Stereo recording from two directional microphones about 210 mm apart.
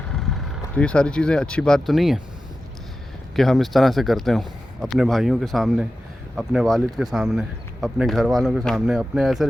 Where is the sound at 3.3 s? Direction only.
Centre (ahead or behind).